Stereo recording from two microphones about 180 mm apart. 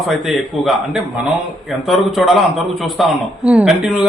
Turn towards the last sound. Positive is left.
turn(degrees=-5)  # may be behind; listen again after turning